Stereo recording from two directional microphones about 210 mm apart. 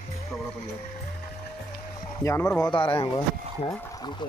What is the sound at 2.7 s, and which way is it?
Speech, 25° left (ahead or behind).